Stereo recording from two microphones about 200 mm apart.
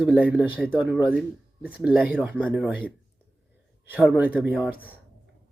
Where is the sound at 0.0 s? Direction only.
5° right (ahead or behind).